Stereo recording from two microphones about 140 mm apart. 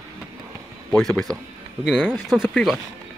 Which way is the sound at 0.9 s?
5° left (ahead or behind).